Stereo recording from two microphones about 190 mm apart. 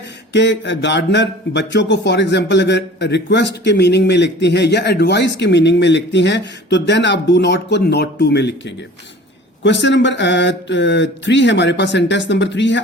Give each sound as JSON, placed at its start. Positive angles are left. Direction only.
{"t": 0.3, "sound": "speech", "side_deg": 65}